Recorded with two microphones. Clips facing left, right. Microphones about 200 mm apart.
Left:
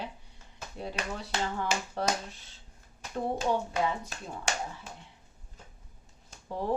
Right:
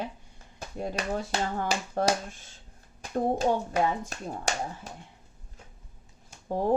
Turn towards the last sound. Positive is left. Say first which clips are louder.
# right 6 dB
turn(degrees=-45)  # may be behind; listen again after turning